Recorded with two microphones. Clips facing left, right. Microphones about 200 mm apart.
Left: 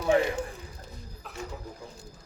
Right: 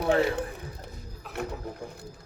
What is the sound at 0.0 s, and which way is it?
Speech, 60° right (ahead or behind).